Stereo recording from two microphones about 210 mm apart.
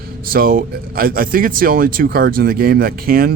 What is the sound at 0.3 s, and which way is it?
Speech, 45° right (ahead or behind).